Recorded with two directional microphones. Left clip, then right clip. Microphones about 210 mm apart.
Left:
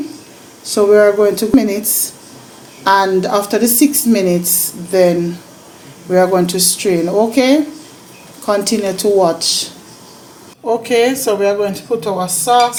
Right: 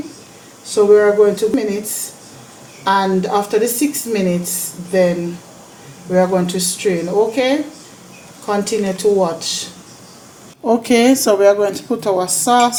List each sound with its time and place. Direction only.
0.6 s speech: 50° left (ahead or behind)
2.8 s speech: 45° left (ahead or behind)
10.7 s a woman's voice: 35° right (ahead or behind)